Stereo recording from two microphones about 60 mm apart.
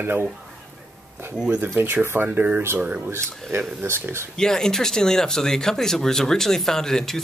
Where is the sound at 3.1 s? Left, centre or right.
Right.